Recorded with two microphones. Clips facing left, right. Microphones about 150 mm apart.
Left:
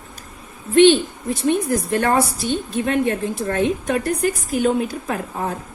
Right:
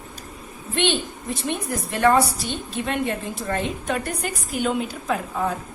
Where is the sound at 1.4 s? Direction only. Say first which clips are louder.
Left 9 dB; 45° left (ahead or behind).